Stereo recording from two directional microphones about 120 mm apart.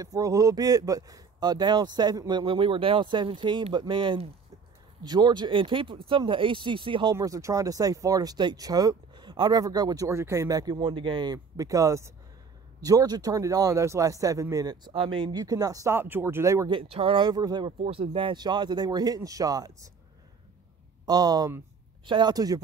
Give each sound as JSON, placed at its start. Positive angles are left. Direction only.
{"t": 0.0, "sound": "speech", "side_deg": -30}
{"t": 7.2, "sound": "a man's voice", "side_deg": -25}
{"t": 15.4, "sound": "a man's voice", "side_deg": -30}
{"t": 16.6, "sound": "speech", "side_deg": -50}
{"t": 17.8, "sound": "speech", "side_deg": -50}
{"t": 21.0, "sound": "speech", "side_deg": -35}